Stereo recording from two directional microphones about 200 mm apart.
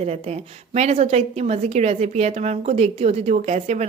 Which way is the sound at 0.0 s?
30° right (ahead or behind).